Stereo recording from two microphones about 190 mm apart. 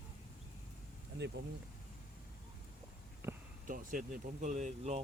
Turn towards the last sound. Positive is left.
turn(degrees=-35)  # may be behind; listen again after turning